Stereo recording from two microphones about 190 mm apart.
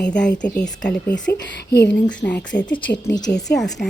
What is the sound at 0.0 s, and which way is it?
Speech, 5° left (ahead or behind).